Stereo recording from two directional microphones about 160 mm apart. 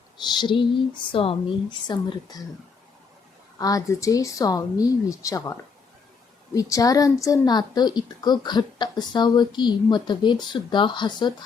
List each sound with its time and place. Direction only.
0.3 s a woman's voice: 30° left (ahead or behind)
3.6 s a woman's voice: 20° left (ahead or behind)